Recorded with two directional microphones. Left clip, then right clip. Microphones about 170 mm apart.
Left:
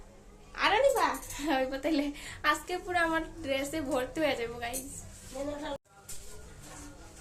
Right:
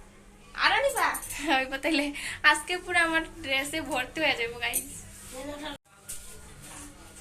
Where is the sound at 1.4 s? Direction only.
20° left (ahead or behind).